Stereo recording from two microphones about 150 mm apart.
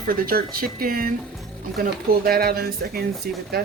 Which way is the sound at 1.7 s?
90° right.